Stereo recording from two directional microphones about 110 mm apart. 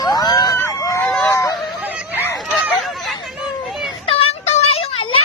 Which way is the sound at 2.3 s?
Centre (ahead or behind).